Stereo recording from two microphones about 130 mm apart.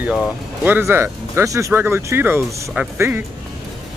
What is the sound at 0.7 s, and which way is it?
Speech, 15° right (ahead or behind).